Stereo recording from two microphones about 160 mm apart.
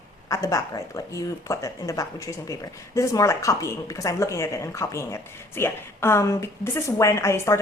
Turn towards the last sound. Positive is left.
turn(degrees=15)  # may be behind; listen again after turning